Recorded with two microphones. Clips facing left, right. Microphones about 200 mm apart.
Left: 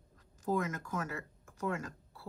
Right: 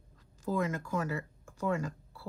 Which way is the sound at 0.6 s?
30° right (ahead or behind).